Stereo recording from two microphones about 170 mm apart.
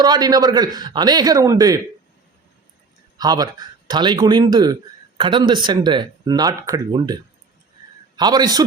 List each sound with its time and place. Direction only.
0.0 s speech: 25° right (ahead or behind)
3.2 s speech: 25° right (ahead or behind)